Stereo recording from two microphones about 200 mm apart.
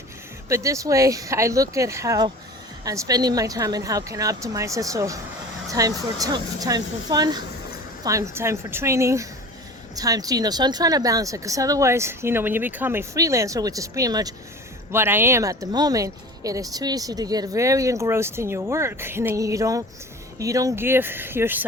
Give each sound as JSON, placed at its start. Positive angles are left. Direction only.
{"t": 0.4, "sound": "speech", "side_deg": -15}